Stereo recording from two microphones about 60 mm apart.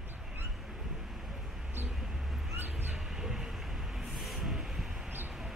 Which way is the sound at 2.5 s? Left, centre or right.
Right.